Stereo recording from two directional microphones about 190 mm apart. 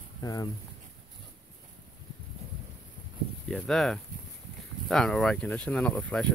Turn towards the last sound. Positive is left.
turn(degrees=5)  # may be behind; listen again after turning